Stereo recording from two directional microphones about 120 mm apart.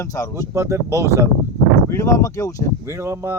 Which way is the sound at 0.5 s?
25° right (ahead or behind).